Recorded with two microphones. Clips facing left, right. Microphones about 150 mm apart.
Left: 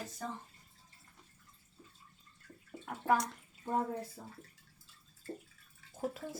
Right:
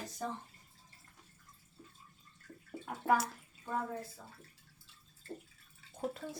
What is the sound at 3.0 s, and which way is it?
Speech, 5° right (ahead or behind).